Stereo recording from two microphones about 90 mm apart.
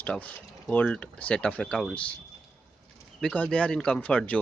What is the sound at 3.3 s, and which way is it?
Speech, 15° left (ahead or behind).